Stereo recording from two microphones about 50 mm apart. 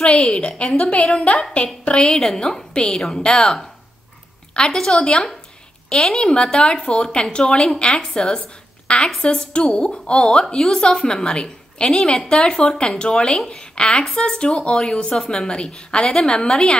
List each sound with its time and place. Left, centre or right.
0.0 s a woman's voice: centre
1.9 s a woman's voice: centre